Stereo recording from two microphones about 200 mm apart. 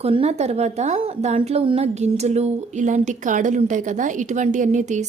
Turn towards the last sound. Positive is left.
turn(degrees=-40)  # may be behind; listen again after turning